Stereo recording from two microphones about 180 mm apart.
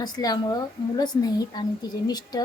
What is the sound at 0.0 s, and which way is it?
A woman's voice, 20° left (ahead or behind).